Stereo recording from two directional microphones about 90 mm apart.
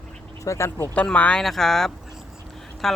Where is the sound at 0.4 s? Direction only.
30° left (ahead or behind).